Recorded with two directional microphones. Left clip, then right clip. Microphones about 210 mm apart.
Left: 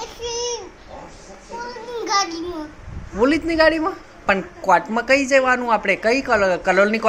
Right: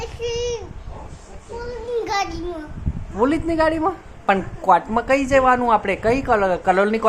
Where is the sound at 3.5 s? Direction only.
Centre (ahead or behind).